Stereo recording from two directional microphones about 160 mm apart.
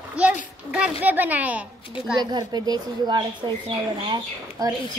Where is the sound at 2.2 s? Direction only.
25° right (ahead or behind).